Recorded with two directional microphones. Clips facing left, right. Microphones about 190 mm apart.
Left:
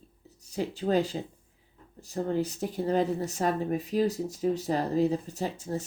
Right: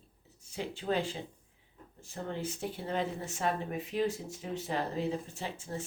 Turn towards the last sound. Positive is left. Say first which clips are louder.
# left 7 dB
turn(degrees=40)  # may be behind; listen again after turning